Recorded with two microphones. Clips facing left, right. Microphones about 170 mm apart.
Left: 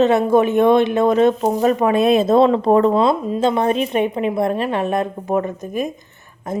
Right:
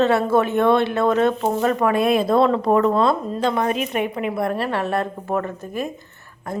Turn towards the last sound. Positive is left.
turn(degrees=15)  # may be behind; listen again after turning